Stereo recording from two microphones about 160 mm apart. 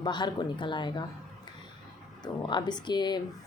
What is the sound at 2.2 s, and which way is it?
Speech, 30° left (ahead or behind).